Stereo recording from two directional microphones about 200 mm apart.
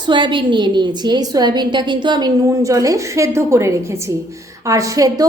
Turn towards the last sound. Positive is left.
turn(degrees=-20)  # may be behind; listen again after turning